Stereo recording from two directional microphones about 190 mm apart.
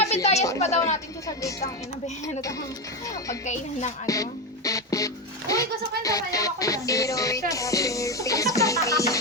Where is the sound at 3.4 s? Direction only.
40° left (ahead or behind).